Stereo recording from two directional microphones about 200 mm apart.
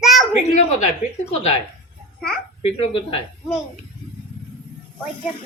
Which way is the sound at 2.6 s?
30° left (ahead or behind).